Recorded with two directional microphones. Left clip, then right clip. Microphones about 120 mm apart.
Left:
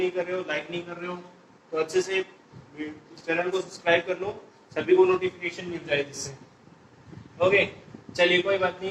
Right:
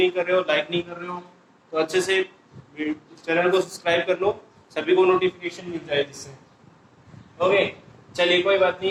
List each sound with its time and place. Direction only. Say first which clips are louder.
0.0 s a man's voice: right 7 dB; 30° right (ahead or behind)
7.3 s a man's voice: right 2 dB; 30° right (ahead or behind)